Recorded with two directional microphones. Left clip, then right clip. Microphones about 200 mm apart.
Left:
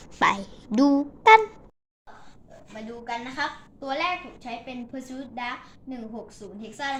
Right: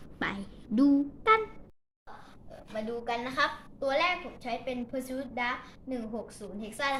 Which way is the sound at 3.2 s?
35° right (ahead or behind).